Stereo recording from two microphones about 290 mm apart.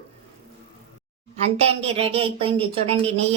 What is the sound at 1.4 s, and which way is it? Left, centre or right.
A woman's voice, right.